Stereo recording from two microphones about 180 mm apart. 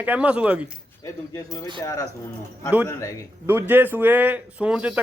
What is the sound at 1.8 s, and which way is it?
A man's voice, 15° left (ahead or behind).